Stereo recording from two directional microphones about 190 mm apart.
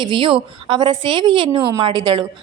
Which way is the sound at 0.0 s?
25° right (ahead or behind).